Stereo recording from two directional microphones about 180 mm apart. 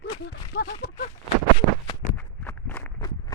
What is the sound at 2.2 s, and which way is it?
Walk, 10° left (ahead or behind).